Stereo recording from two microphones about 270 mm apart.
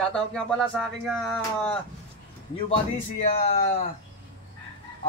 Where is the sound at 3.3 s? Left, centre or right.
Left.